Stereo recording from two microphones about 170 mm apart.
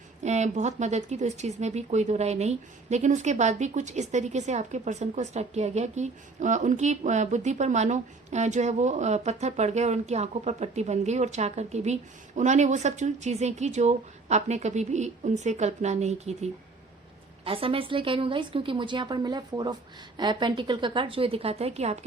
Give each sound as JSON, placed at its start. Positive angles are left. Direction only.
{"t": 0.2, "sound": "a woman's voice", "side_deg": -45}